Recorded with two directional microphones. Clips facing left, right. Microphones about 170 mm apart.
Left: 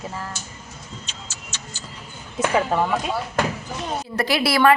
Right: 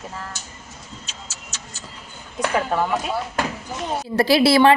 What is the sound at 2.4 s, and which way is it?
Speech, 5° left (ahead or behind).